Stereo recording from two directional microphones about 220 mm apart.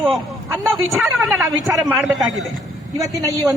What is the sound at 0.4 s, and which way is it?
Speech, 10° right (ahead or behind).